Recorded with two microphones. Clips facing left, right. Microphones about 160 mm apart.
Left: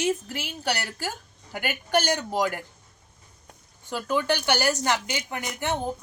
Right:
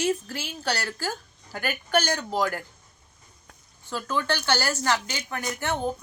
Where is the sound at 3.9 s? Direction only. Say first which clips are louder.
Left 2 dB; 15° left (ahead or behind).